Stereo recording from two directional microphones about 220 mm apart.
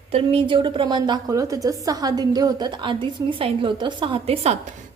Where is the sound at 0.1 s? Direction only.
25° right (ahead or behind).